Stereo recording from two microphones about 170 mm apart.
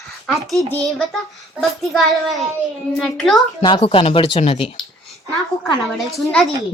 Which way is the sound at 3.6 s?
30° left (ahead or behind).